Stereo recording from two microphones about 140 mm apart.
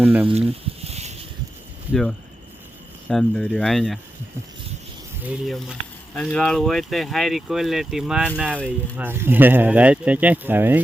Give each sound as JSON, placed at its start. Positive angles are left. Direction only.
{"t": 0.0, "sound": "speech", "side_deg": -10}
{"t": 0.9, "sound": "a sound", "side_deg": -50}
{"t": 1.9, "sound": "speech", "side_deg": 5}
{"t": 5.2, "sound": "speech", "side_deg": -5}